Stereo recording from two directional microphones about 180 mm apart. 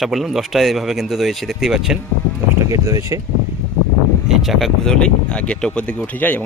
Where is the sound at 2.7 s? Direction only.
20° right (ahead or behind).